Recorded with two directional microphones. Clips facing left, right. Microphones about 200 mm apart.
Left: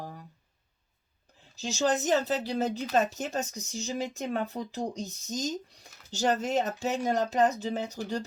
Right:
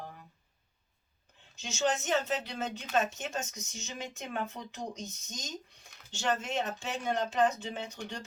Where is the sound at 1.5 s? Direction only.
35° left (ahead or behind).